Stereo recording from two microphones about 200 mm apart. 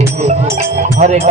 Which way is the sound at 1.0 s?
35° right (ahead or behind).